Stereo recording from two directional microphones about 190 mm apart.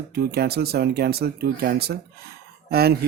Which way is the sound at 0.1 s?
55° right (ahead or behind).